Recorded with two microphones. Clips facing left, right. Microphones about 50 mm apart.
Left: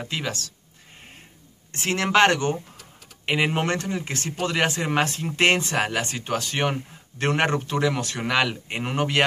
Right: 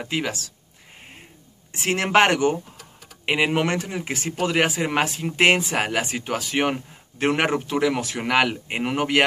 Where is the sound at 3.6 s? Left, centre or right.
Centre.